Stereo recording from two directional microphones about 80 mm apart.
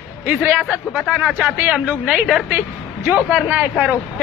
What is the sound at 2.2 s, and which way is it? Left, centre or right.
Speech, centre.